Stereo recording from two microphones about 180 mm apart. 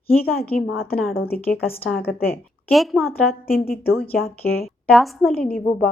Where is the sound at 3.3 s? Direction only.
55° left (ahead or behind).